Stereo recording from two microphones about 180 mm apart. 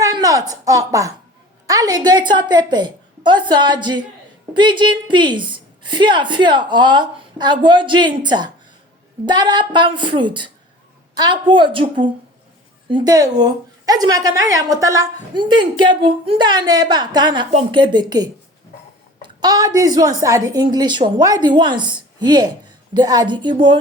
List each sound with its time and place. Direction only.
0.0 s a woman's voice: 20° right (ahead or behind)
19.4 s a woman's voice: 20° right (ahead or behind)